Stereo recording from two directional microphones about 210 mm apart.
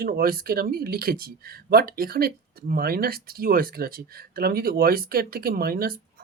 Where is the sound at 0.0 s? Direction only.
45° right (ahead or behind).